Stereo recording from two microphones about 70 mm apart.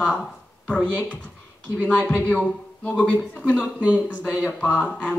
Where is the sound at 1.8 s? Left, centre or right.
Centre.